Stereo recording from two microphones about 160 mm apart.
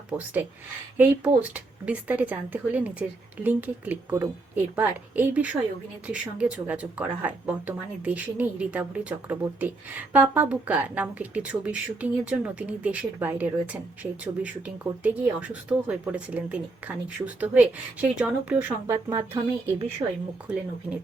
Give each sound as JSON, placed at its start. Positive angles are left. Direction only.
{"t": 0.1, "sound": "speech", "side_deg": -10}